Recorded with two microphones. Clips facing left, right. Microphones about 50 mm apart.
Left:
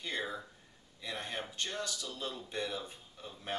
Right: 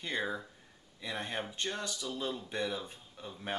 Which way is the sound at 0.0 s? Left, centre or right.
Centre.